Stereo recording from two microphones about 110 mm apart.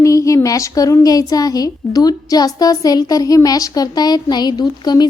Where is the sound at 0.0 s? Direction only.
30° left (ahead or behind).